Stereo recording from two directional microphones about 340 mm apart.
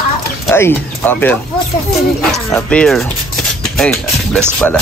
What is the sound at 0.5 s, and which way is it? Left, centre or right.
Speech, centre.